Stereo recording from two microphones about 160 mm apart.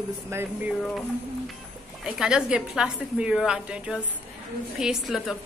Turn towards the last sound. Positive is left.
turn(degrees=0)  # may be behind; listen again after turning